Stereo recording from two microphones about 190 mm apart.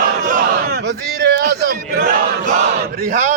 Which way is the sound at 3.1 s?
45° right (ahead or behind).